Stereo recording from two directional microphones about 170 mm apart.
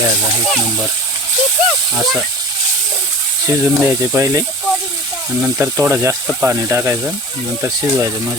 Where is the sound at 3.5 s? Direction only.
15° right (ahead or behind).